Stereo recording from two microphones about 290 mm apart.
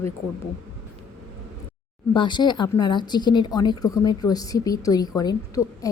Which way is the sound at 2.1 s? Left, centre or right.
Centre.